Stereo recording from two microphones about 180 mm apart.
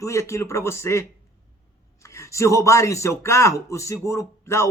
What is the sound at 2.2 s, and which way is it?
Speech, 15° left (ahead or behind).